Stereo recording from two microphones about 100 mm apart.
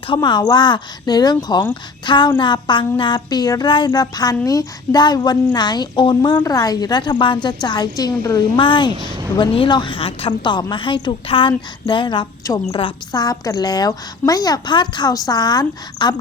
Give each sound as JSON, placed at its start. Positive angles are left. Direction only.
{"t": 0.2, "sound": "speech", "side_deg": 45}
{"t": 6.4, "sound": "a woman's voice", "side_deg": 40}
{"t": 8.5, "sound": "a woman's voice", "side_deg": 55}
{"t": 13.1, "sound": "a woman's voice", "side_deg": 40}